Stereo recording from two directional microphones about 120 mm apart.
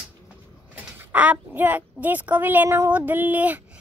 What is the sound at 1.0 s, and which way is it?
Child singing, 15° right (ahead or behind).